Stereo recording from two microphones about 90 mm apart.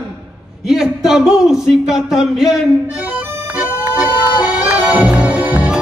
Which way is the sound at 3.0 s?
20° right (ahead or behind).